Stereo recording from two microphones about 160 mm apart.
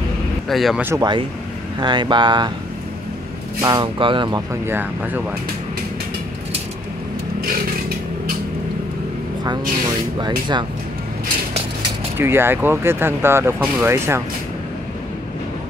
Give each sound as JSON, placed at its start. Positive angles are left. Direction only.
{"t": 0.5, "sound": "speech", "side_deg": 0}
{"t": 0.8, "sound": "speech", "side_deg": -25}
{"t": 3.6, "sound": "speech", "side_deg": -30}
{"t": 4.6, "sound": "speech", "side_deg": -10}
{"t": 10.1, "sound": "speech", "side_deg": -25}
{"t": 12.2, "sound": "speech", "side_deg": -15}